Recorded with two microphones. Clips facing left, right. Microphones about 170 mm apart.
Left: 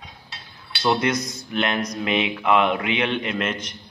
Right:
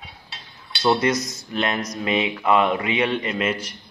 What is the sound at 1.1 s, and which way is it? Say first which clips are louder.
Speech: even; 55° left (ahead or behind).